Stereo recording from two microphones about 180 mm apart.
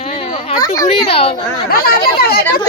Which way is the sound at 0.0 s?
35° left (ahead or behind).